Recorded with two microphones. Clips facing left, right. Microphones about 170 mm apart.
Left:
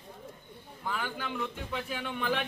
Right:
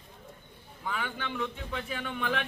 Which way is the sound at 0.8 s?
Centre (ahead or behind).